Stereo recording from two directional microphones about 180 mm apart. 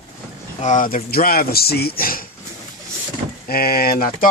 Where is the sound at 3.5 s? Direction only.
55° left (ahead or behind).